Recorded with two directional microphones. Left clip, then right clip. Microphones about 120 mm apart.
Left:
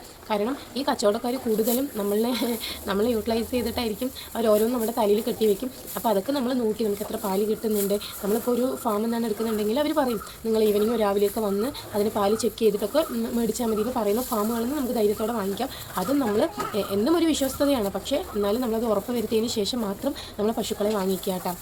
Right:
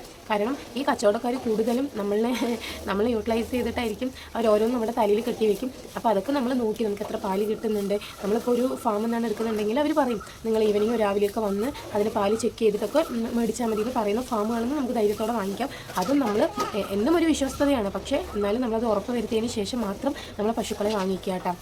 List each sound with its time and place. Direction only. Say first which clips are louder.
0.3 s speech: right 1 dB; 15° left (ahead or behind)